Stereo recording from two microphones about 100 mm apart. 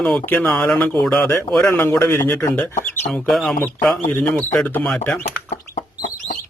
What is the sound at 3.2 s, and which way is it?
Speech, centre (ahead or behind).